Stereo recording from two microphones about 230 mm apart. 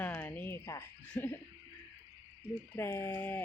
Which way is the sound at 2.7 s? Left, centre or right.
Centre.